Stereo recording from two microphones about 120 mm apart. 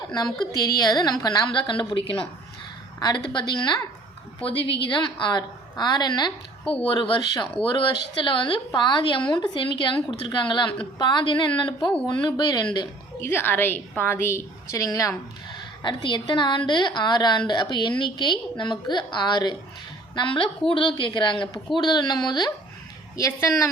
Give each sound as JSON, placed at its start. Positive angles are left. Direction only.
{"t": 0.6, "sound": "a woman's voice", "side_deg": 35}
{"t": 13.3, "sound": "a woman's voice", "side_deg": 20}
{"t": 15.5, "sound": "a woman's voice", "side_deg": 40}